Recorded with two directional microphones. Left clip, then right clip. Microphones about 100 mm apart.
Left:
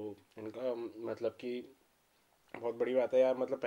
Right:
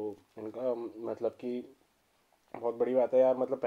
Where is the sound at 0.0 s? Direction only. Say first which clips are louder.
Right 5 dB; 25° right (ahead or behind).